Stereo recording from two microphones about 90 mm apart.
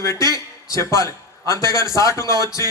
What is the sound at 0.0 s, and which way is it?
A man's voice, 35° left (ahead or behind).